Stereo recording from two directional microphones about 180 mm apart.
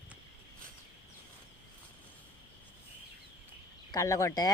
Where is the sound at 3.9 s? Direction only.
15° left (ahead or behind).